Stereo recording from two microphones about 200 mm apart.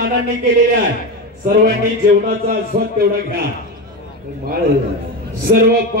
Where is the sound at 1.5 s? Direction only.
45° right (ahead or behind).